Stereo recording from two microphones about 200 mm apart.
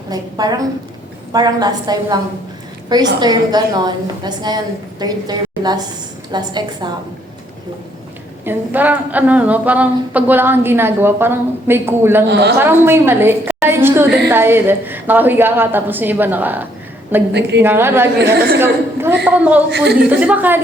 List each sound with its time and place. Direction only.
0.1 s a woman's voice: 20° right (ahead or behind)
8.4 s a woman's voice: 10° right (ahead or behind)
12.3 s a woman's voice: 60° right (ahead or behind)
12.5 s a woman's voice: 10° right (ahead or behind)
19.7 s a woman's voice: 55° right (ahead or behind)
20.1 s a woman's voice: 10° right (ahead or behind)